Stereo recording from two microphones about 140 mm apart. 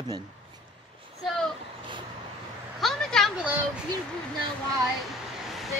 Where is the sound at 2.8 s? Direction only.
5° left (ahead or behind).